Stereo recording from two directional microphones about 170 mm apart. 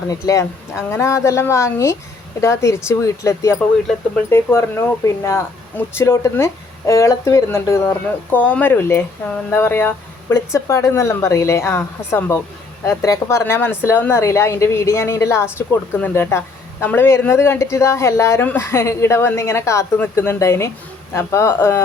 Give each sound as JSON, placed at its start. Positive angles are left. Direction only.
{"t": 0.1, "sound": "speech", "side_deg": 20}